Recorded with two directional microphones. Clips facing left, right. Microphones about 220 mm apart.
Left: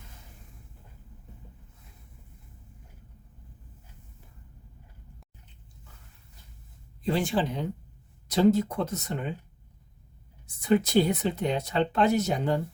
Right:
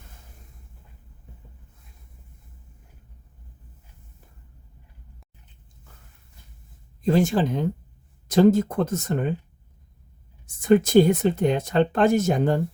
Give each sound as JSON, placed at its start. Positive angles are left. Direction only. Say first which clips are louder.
{"t": 7.0, "sound": "speech", "louder": "right 6 dB", "side_deg": -45}
{"t": 10.4, "sound": "speech", "louder": "right 6 dB", "side_deg": -50}